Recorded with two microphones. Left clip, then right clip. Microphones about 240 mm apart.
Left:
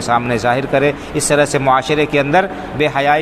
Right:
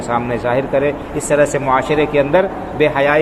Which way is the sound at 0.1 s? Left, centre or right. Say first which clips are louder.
Left 3 dB; left.